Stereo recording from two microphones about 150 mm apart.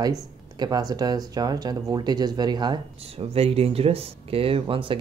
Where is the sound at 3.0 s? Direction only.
40° right (ahead or behind).